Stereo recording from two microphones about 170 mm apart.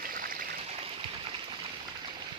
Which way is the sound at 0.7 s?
35° right (ahead or behind).